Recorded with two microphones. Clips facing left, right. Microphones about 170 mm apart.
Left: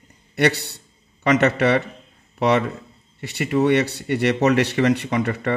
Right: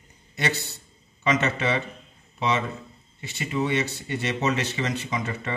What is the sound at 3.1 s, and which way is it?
Speech, 70° left (ahead or behind).